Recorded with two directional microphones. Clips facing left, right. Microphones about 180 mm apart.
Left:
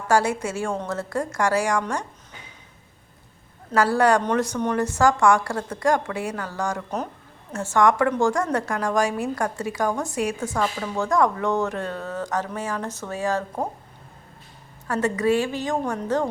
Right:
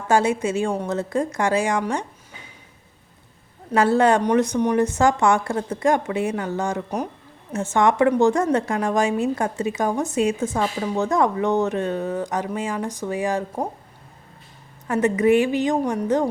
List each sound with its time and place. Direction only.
0.1 s speech: 20° right (ahead or behind)
3.8 s speech: 25° right (ahead or behind)
14.8 s speech: 20° right (ahead or behind)